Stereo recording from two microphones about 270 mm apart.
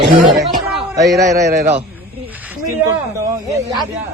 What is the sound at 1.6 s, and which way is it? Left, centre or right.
Speech, right.